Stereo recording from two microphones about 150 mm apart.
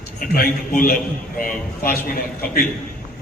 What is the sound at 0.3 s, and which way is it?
A man's voice, 70° left (ahead or behind).